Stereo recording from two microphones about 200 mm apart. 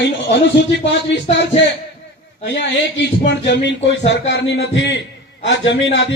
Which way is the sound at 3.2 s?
60° left (ahead or behind).